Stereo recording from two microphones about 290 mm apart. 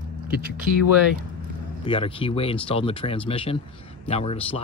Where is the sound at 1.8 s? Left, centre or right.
Centre.